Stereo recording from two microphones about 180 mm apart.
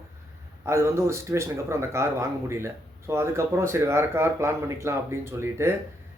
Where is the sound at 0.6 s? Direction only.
15° right (ahead or behind).